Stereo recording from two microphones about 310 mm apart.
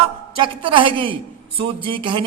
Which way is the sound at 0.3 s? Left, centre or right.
Centre.